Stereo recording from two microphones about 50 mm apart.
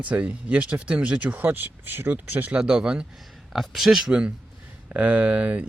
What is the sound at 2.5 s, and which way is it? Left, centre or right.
Speech, centre.